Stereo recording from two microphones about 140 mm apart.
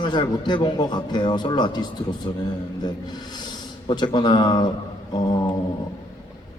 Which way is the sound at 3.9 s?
30° left (ahead or behind).